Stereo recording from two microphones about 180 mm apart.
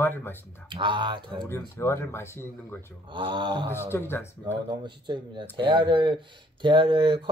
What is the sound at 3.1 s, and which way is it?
Speech, 30° right (ahead or behind).